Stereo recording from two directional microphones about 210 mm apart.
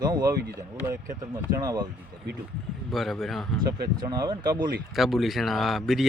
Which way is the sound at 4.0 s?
20° right (ahead or behind).